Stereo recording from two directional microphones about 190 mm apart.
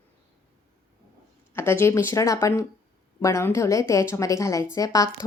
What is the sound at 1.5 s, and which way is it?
A woman's voice, 15° left (ahead or behind).